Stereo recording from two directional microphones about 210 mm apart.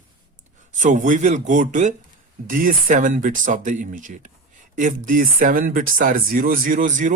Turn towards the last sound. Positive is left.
turn(degrees=-40)  # may be behind; listen again after turning